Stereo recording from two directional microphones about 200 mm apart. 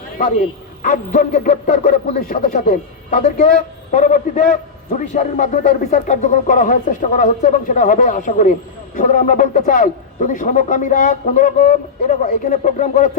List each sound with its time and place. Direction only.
0.2 s a man's voice: 40° left (ahead or behind)